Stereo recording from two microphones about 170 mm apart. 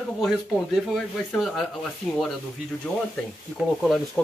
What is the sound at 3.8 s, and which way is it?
Speech, centre (ahead or behind).